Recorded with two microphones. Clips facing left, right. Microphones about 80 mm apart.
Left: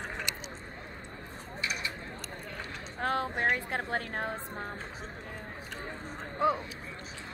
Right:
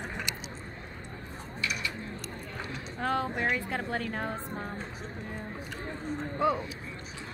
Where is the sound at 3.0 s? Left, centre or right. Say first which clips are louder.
Even; left.